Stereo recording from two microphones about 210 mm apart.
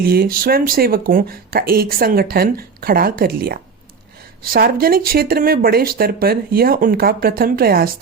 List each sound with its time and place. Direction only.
0.0 s speech: 45° right (ahead or behind)